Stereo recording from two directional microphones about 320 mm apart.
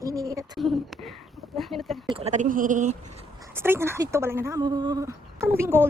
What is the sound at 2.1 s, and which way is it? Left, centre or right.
Speech, right.